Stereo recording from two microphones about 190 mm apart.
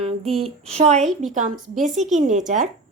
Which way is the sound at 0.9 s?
Centre (ahead or behind).